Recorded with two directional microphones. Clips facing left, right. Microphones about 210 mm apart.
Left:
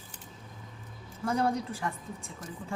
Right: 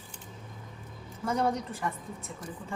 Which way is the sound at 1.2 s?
Centre (ahead or behind).